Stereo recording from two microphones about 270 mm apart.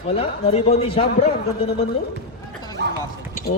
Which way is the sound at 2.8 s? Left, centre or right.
Right.